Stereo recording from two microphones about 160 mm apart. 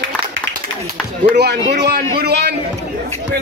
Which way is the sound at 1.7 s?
90° right.